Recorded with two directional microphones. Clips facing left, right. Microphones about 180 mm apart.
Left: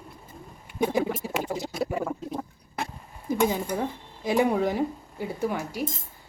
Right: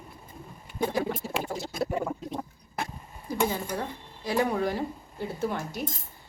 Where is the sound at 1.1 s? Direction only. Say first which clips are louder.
Left 2 dB; 15° left (ahead or behind).